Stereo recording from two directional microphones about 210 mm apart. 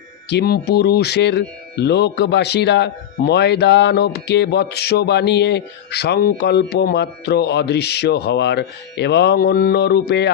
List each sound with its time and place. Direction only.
0.3 s speech: 50° left (ahead or behind)